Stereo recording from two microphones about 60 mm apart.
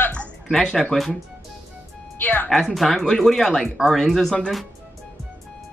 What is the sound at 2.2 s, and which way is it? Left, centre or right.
Speech, left.